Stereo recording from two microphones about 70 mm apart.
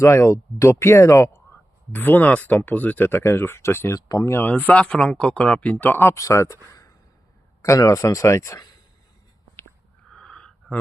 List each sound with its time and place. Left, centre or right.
0.0 s speech: left
1.9 s speech: left
3.9 s speech: left
4.3 s speech: left
6.0 s speech: left
7.6 s speech: left
10.1 s a sound: centre